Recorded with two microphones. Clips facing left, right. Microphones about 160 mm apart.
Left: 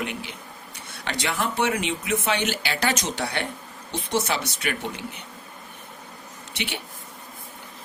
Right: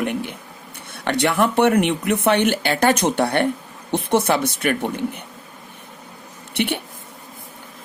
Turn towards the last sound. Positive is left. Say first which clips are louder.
# right 10 dB
turn(degrees=-55)  # may be behind; listen again after turning